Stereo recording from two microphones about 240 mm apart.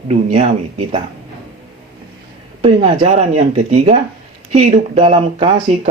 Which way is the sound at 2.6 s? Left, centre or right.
Right.